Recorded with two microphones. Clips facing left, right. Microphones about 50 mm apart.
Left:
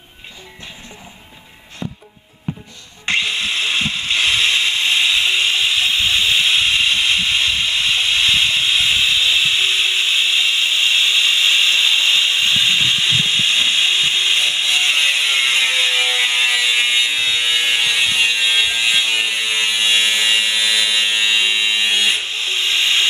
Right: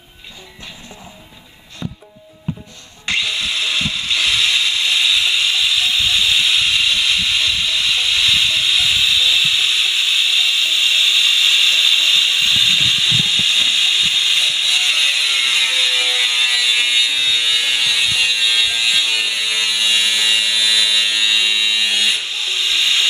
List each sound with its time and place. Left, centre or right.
1.8 s music: centre
3.1 s tools: left